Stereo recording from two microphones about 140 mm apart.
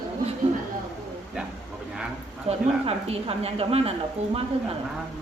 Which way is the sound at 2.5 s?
45° right (ahead or behind).